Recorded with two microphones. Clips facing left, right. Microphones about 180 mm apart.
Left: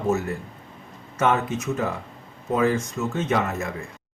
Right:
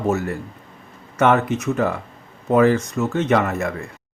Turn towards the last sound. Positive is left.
turn(degrees=-65)  # may be behind; listen again after turning